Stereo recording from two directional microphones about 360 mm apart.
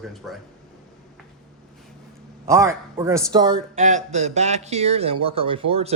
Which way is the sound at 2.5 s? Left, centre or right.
Centre.